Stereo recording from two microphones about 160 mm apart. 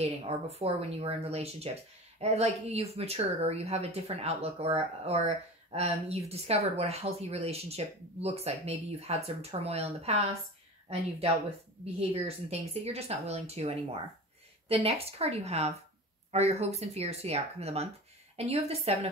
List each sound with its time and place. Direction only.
0.0 s speech: 40° right (ahead or behind)
11.8 s speech: 40° right (ahead or behind)